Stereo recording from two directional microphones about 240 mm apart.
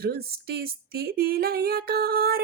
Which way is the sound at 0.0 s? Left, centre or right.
Right.